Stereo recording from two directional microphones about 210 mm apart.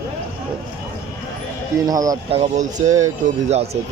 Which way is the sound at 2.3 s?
35° right (ahead or behind).